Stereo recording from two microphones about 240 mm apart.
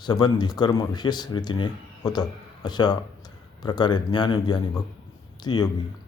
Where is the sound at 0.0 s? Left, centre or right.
Centre.